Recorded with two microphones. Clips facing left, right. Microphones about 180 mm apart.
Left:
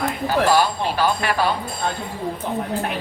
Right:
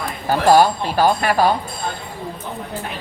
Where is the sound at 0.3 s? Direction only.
45° right (ahead or behind).